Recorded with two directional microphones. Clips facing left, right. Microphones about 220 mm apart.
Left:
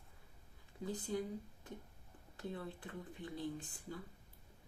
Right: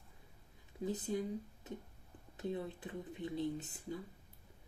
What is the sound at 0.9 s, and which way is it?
Speech, 20° right (ahead or behind).